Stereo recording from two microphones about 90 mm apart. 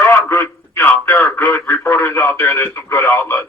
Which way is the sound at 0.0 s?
30° left (ahead or behind).